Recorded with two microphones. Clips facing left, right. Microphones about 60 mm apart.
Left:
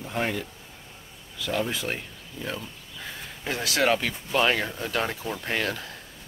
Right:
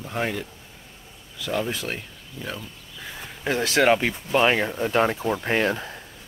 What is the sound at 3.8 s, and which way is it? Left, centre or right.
Speech, right.